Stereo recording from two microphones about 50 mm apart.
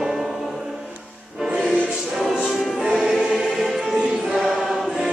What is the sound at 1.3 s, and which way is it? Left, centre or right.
Music, centre.